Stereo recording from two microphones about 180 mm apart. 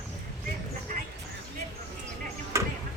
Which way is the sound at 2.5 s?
15° right (ahead or behind).